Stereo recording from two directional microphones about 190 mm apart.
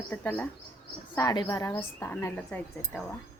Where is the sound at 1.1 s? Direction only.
20° left (ahead or behind).